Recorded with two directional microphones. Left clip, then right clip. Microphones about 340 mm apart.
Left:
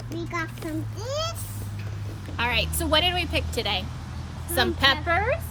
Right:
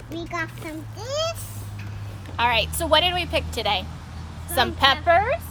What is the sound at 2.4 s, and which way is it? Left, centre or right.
Speech, centre.